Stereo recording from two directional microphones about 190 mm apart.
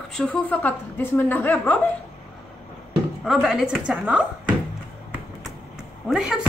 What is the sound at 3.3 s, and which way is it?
A woman's voice, centre (ahead or behind).